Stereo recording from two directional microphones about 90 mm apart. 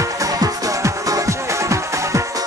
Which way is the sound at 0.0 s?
40° right (ahead or behind).